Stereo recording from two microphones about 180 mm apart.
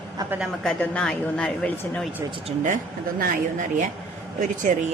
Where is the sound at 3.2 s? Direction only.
45° right (ahead or behind).